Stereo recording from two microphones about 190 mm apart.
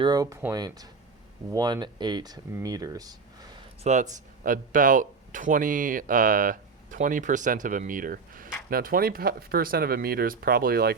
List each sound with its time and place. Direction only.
0.0 s speech: 20° right (ahead or behind)
3.8 s speech: 40° right (ahead or behind)